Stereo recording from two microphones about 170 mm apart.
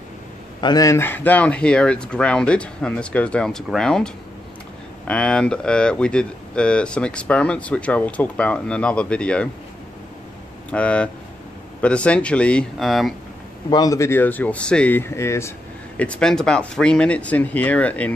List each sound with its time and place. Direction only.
0.6 s speech: 25° left (ahead or behind); by 9.5 s 5° left (ahead or behind)
10.7 s speech: 5° left (ahead or behind)
13.7 s speech: 20° left (ahead or behind)
16.0 s speech: 5° left (ahead or behind)